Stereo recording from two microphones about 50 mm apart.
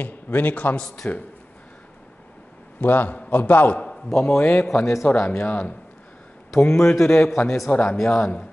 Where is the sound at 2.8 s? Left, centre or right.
Left.